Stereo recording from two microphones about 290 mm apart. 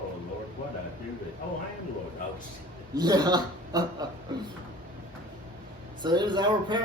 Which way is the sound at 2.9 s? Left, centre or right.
Centre.